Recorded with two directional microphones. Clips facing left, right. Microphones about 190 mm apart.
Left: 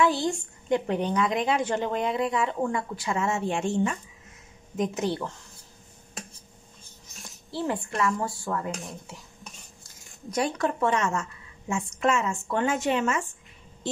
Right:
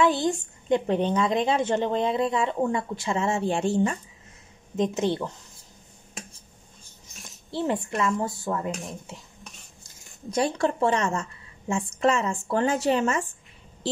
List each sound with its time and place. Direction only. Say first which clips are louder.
0.0 s a woman's voice: right 2 dB; 20° right (ahead or behind); by 4.0 s 35° right (ahead or behind)
4.7 s a woman's voice: right 3 dB; 25° right (ahead or behind)
7.2 s speech: right 3 dB; 20° right (ahead or behind)
10.3 s a woman's voice: right 2 dB; 30° right (ahead or behind)